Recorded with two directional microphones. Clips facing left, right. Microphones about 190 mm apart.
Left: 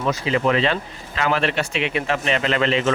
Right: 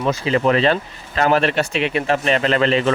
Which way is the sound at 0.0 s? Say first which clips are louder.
Right 3 dB; 35° right (ahead or behind).